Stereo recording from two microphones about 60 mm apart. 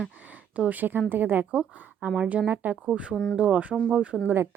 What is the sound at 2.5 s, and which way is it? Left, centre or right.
Speech, right.